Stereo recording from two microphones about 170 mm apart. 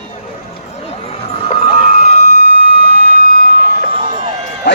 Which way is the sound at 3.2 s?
60° left (ahead or behind).